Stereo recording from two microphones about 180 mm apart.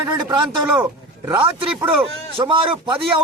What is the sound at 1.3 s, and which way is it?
A man's voice, 25° right (ahead or behind).